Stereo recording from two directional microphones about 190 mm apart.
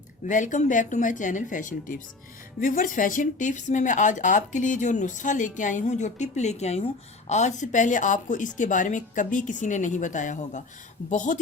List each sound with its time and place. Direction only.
0.3 s speech: 40° left (ahead or behind)